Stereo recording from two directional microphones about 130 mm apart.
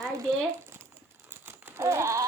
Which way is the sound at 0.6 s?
20° right (ahead or behind).